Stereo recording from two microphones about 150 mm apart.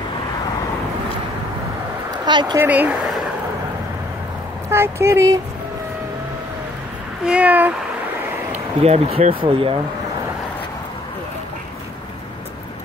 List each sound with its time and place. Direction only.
2.0 s a sound: 30° right (ahead or behind)
2.6 s speech: 10° right (ahead or behind)
4.6 s speech: 15° right (ahead or behind)
7.2 s speech: 10° right (ahead or behind)
8.8 s speech: 45° right (ahead or behind)